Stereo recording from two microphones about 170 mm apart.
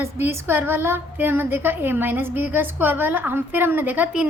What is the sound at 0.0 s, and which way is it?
A woman's voice, 15° right (ahead or behind).